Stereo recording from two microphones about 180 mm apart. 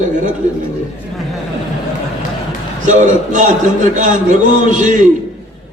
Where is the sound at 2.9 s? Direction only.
45° right (ahead or behind).